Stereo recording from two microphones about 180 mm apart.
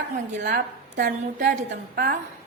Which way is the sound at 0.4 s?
60° right (ahead or behind).